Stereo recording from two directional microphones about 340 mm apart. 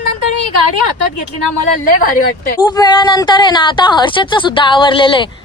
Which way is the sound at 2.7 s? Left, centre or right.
Centre.